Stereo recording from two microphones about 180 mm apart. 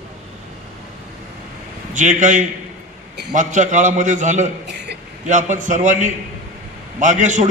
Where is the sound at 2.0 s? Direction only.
45° right (ahead or behind).